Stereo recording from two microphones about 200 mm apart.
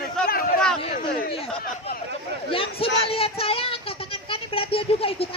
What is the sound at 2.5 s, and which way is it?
Speech, 25° left (ahead or behind).